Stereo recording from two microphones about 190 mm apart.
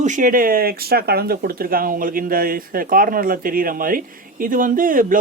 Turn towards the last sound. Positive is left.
turn(degrees=-45)  # may be behind; listen again after turning